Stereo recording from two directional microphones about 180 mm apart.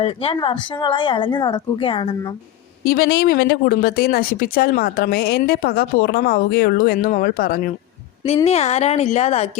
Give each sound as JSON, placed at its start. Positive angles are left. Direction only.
{"t": 0.0, "sound": "speech", "side_deg": 35}
{"t": 2.8, "sound": "speech", "side_deg": 55}
{"t": 8.4, "sound": "speech", "side_deg": 35}